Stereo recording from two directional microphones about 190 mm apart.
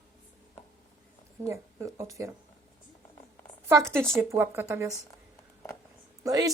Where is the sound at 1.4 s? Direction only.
15° right (ahead or behind).